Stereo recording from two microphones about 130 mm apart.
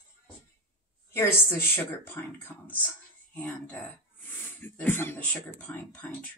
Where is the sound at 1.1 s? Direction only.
20° left (ahead or behind).